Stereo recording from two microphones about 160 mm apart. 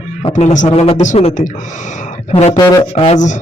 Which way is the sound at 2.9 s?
45° left (ahead or behind).